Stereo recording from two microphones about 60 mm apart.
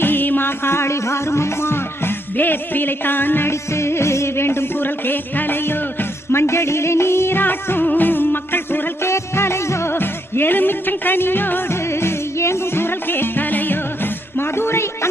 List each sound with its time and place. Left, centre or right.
0.0 s music: left
3.5 s music: left
9.0 s music: left
9.9 s music: left